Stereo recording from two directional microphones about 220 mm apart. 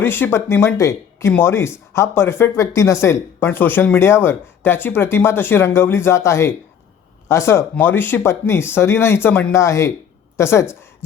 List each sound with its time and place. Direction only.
0.0 s a woman's voice: 10° left (ahead or behind)